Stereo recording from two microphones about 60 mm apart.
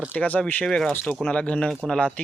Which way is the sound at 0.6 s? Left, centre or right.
Centre.